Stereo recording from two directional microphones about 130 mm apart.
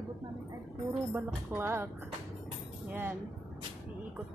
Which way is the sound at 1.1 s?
20° right (ahead or behind).